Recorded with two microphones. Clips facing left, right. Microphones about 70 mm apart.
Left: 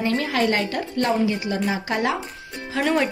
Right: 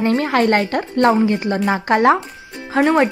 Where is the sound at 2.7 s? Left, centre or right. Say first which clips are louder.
Right 7 dB; right.